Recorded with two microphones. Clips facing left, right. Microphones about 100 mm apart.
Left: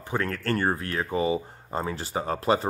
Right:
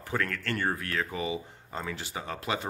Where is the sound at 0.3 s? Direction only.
35° left (ahead or behind).